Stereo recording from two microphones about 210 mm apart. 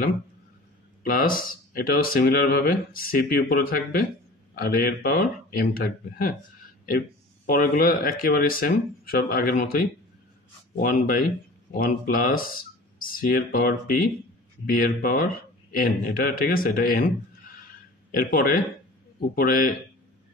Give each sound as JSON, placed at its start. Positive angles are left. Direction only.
{"t": 1.0, "sound": "speech", "side_deg": 40}
{"t": 7.4, "sound": "speech", "side_deg": 45}
{"t": 17.6, "sound": "a sound", "side_deg": 40}
{"t": 19.1, "sound": "speech", "side_deg": 45}